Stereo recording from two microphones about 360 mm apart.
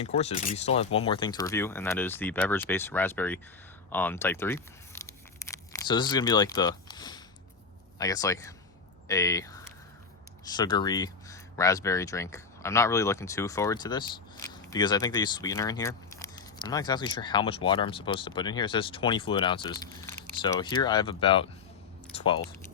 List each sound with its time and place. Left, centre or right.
0.0 s speech: centre
5.0 s tearing: centre
7.9 s speech: centre